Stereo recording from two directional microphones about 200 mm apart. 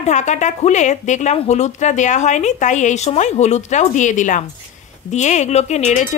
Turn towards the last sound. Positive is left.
turn(degrees=35)  # may be behind; listen again after turning